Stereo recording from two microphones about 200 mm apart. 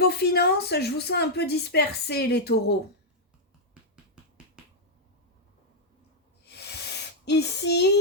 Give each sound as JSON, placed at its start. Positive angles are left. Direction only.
{"t": 0.0, "sound": "a woman's voice", "side_deg": 55}
{"t": 4.6, "sound": "finger snapping", "side_deg": -5}
{"t": 6.4, "sound": "a sound", "side_deg": 55}